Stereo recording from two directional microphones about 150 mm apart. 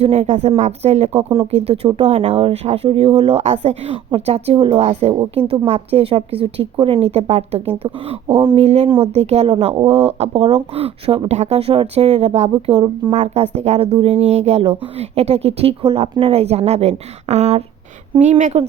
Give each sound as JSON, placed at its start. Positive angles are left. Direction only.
{"t": 0.0, "sound": "speech", "side_deg": -45}
{"t": 9.5, "sound": "speech", "side_deg": -35}